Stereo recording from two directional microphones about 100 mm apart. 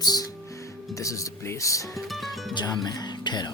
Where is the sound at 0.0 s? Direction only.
40° left (ahead or behind).